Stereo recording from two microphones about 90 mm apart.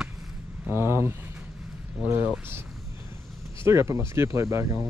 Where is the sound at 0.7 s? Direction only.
25° right (ahead or behind).